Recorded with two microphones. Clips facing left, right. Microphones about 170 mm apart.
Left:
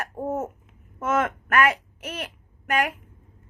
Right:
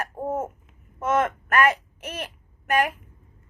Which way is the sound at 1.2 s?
30° right (ahead or behind).